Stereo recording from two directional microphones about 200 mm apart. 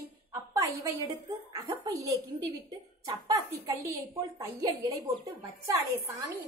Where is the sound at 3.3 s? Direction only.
15° right (ahead or behind).